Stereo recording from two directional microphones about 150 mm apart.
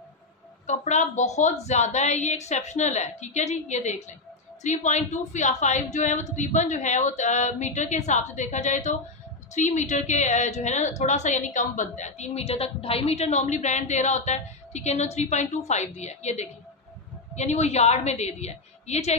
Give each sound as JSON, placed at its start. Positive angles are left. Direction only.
{"t": 0.7, "sound": "a woman's voice", "side_deg": 50}